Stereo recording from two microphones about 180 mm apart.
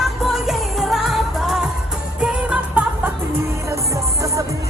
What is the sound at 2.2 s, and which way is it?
Music, 5° right (ahead or behind).